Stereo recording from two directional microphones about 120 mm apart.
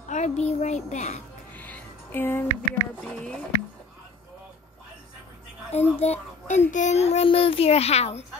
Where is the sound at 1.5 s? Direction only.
15° left (ahead or behind).